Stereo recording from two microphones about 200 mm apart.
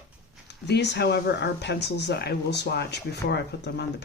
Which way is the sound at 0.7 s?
55° left (ahead or behind).